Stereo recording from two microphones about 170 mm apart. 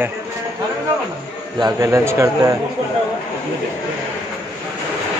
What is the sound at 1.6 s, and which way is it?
Speech, 20° right (ahead or behind).